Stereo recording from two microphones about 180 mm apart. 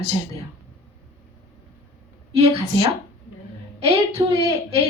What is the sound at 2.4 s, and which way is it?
A woman's voice, 35° right (ahead or behind).